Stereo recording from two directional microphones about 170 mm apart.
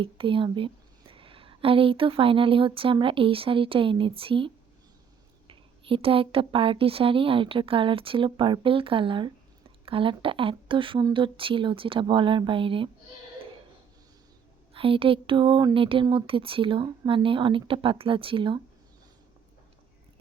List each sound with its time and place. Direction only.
0.0 s a woman's voice: 30° right (ahead or behind)
14.7 s a woman's voice: 30° right (ahead or behind)